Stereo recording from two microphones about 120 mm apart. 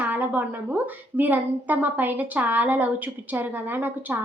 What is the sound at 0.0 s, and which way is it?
A woman's voice, 15° right (ahead or behind).